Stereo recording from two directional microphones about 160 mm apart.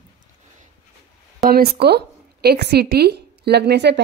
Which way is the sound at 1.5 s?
75° right (ahead or behind).